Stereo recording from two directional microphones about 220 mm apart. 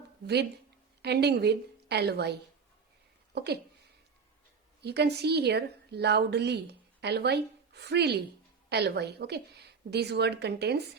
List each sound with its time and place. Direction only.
1.0 s a woman's voice: 50° right (ahead or behind)
4.8 s a woman's voice: 50° right (ahead or behind)